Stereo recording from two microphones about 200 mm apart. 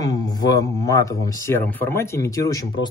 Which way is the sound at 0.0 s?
20° left (ahead or behind).